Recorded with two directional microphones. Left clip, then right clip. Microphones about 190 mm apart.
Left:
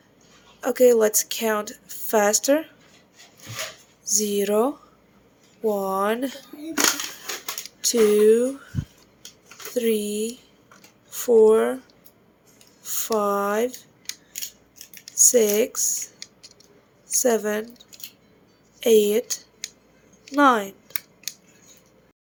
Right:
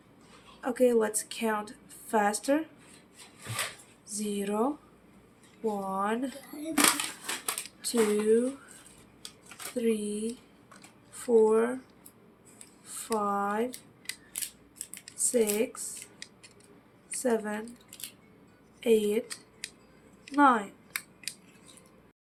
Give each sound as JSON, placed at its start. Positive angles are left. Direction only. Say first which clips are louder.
{"t": 0.6, "sound": "a woman's voice", "louder": "left 9 dB", "side_deg": 55}
{"t": 4.0, "sound": "a woman's voice", "louder": "left 12 dB", "side_deg": 55}
{"t": 5.7, "sound": "a woman's voice", "louder": "left 8 dB", "side_deg": 55}
{"t": 7.8, "sound": "speech", "louder": "left 11 dB", "side_deg": 55}
{"t": 9.7, "sound": "a woman's voice", "louder": "left 7 dB", "side_deg": 55}
{"t": 12.8, "sound": "speech", "louder": "left 8 dB", "side_deg": 55}
{"t": 15.2, "sound": "a woman's voice", "louder": "left 10 dB", "side_deg": 55}
{"t": 17.1, "sound": "a woman's voice", "louder": "left 9 dB", "side_deg": 55}
{"t": 18.8, "sound": "a woman's voice", "louder": "left 8 dB", "side_deg": 55}